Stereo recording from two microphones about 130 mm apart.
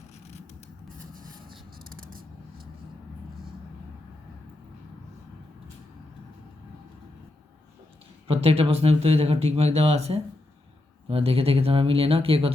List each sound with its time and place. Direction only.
1.1 s vehicle: 90° right
1.9 s a sound: 90° right
8.3 s speech: 50° right (ahead or behind)